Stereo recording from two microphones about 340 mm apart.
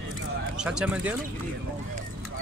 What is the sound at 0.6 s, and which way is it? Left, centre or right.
Speech, centre.